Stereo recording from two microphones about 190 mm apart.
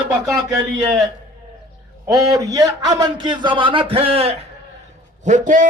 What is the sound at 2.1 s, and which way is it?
A man's voice, 20° right (ahead or behind).